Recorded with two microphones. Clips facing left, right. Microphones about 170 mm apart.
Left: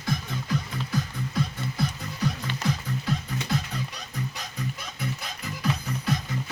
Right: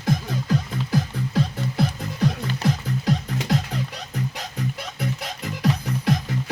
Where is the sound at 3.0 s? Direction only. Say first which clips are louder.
Right 7 dB; 85° right.